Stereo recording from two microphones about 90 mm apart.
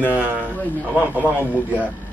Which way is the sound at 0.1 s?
15° right (ahead or behind).